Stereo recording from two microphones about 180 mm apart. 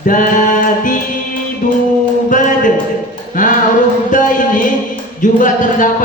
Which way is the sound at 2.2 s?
45° left (ahead or behind).